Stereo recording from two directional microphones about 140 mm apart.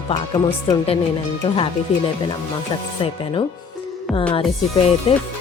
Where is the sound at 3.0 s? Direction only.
40° left (ahead or behind).